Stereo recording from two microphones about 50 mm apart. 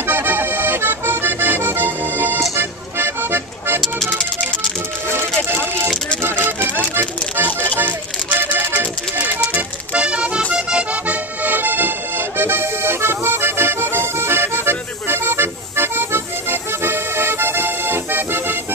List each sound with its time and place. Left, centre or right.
0.0 s accordion: right
2.5 s music: right
4.1 s music: centre
7.0 s music: right
9.6 s accordion: right